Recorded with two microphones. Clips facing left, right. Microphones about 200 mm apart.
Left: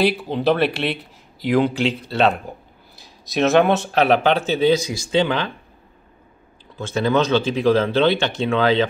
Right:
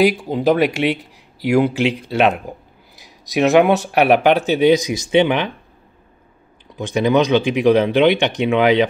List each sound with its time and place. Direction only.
0.0 s speech: 10° right (ahead or behind)
6.8 s speech: 15° right (ahead or behind)